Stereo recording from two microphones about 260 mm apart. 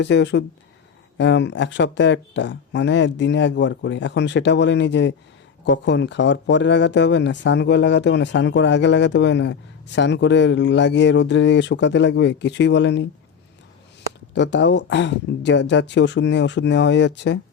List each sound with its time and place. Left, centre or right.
0.0 s speech: left
14.3 s speech: left